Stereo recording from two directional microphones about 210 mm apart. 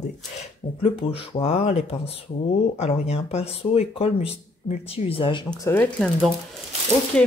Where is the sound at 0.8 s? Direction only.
25° left (ahead or behind).